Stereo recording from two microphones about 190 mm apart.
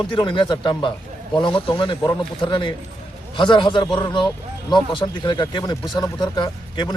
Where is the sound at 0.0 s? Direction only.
25° left (ahead or behind).